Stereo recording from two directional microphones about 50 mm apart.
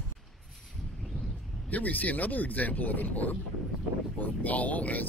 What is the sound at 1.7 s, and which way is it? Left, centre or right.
Speech, left.